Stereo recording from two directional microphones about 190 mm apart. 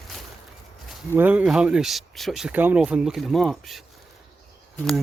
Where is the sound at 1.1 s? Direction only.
10° right (ahead or behind).